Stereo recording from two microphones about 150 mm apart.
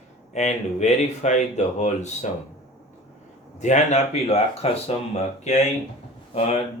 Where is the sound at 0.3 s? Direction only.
50° left (ahead or behind).